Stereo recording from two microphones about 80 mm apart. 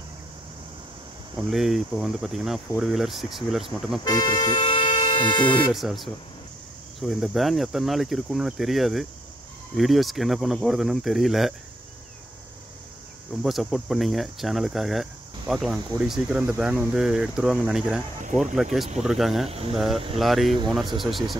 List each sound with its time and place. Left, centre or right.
1.5 s speech: centre
4.0 s speech: left
5.7 s speech: centre
13.4 s speech: centre
16.4 s speech: right
16.9 s speech: centre